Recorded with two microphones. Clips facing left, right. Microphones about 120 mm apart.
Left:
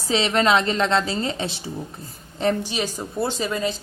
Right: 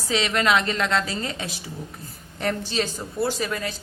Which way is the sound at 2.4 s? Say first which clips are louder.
Left 3 dB; 15° left (ahead or behind).